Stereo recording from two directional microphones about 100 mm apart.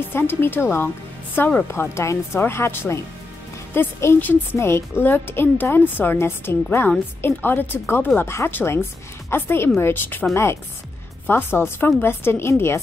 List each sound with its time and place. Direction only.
0.1 s a woman's voice: 20° left (ahead or behind)